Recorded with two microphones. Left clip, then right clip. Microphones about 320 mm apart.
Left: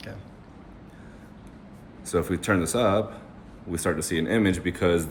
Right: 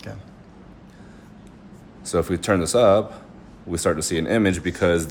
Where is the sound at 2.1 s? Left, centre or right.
Right.